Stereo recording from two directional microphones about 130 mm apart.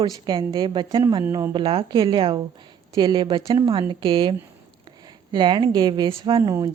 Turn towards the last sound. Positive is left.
turn(degrees=-30)  # may be behind; listen again after turning